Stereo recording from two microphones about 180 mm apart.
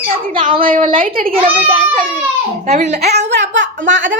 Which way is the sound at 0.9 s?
50° right (ahead or behind).